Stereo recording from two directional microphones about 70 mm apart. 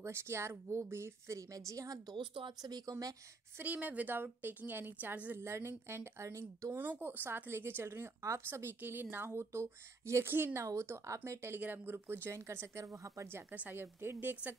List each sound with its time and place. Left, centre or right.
0.0 s a woman's voice: right
2.6 s a woman's voice: right
3.6 s a woman's voice: right
7.0 s speech: right
10.6 s speech: right
12.4 s speech: right
13.3 s a woman's voice: right